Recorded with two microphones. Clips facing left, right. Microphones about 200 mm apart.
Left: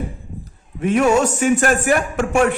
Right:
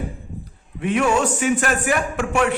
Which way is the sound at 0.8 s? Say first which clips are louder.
Left 4 dB; 40° left (ahead or behind).